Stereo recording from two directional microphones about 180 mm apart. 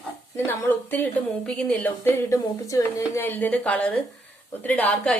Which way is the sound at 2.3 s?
20° left (ahead or behind).